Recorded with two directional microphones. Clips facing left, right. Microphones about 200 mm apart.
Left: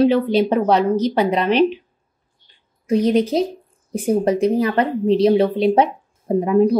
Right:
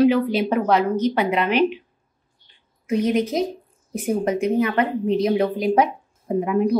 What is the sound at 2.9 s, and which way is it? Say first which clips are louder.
A woman's voice: left 4 dB; 35° left (ahead or behind).